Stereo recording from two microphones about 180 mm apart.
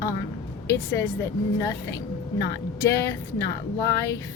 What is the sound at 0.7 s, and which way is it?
Speech, 15° left (ahead or behind).